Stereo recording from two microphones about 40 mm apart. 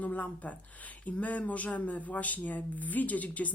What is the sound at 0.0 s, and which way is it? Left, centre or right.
A woman's voice, left.